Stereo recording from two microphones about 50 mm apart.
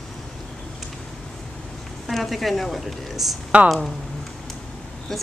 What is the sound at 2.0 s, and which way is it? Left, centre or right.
Speech, centre.